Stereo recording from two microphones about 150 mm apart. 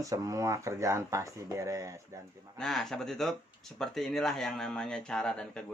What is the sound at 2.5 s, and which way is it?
Speech, 5° left (ahead or behind).